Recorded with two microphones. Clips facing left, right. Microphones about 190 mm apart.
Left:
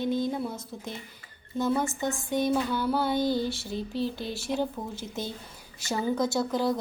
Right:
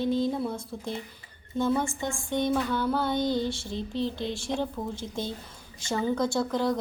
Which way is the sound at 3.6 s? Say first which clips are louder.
Even; 5° left (ahead or behind).